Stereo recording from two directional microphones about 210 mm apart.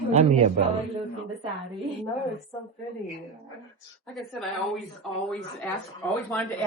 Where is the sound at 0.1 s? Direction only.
30° right (ahead or behind).